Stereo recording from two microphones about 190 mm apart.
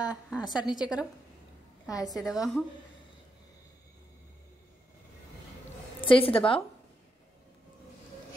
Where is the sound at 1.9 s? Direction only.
20° left (ahead or behind).